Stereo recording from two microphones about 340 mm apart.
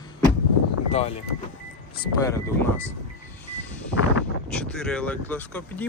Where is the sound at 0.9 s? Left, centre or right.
Centre.